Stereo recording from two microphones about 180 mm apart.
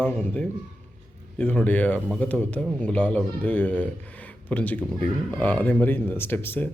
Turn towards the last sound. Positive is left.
turn(degrees=10)  # may be behind; listen again after turning